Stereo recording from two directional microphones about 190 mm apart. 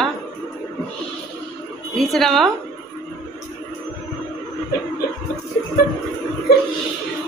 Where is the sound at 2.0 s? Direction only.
Centre (ahead or behind).